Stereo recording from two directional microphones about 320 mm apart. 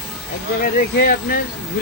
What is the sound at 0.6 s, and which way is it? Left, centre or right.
Speech, left.